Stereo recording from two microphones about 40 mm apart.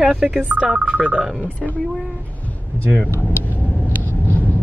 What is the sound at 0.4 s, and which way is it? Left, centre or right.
Speech, right.